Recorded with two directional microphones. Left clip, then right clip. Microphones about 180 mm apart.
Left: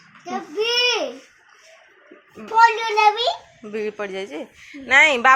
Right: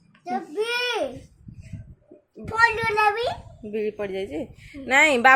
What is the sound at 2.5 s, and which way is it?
Speech, 25° right (ahead or behind).